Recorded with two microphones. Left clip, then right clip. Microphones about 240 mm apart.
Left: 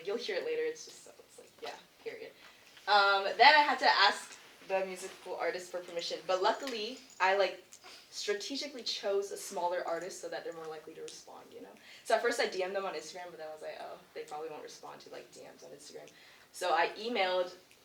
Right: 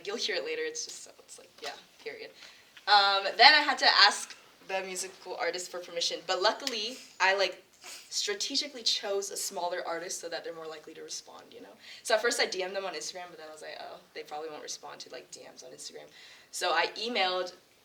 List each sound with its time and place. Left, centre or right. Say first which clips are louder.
0.0 s speech: right 3 dB; right
2.8 s speech: right 3 dB; right
12.0 s speech: right 3 dB; right
16.6 s speech: right 2 dB; right